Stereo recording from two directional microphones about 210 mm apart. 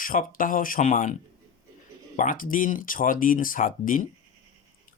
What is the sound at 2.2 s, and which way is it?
Speech, 40° left (ahead or behind).